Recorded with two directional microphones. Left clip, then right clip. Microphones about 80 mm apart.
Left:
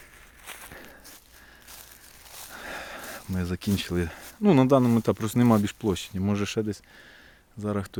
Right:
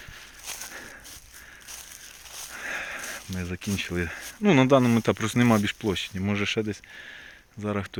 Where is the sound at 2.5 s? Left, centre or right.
Left.